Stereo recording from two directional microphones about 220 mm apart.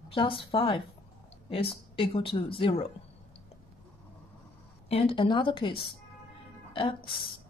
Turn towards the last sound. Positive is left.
turn(degrees=20)  # may be behind; listen again after turning